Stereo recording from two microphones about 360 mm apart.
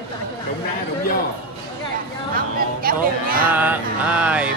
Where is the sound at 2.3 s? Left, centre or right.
Right.